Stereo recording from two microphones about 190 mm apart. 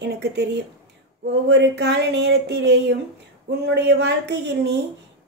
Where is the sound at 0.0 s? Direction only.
65° right (ahead or behind).